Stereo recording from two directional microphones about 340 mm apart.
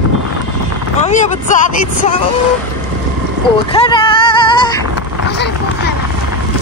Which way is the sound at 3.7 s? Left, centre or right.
Centre.